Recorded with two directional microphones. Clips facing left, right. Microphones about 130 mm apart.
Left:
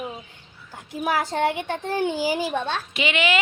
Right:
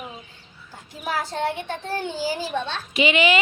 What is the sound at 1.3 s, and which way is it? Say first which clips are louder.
Speech: left 3 dB; 15° left (ahead or behind).